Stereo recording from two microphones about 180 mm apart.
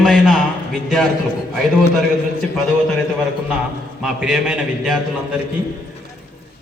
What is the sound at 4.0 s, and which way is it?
A man's voice, 5° right (ahead or behind).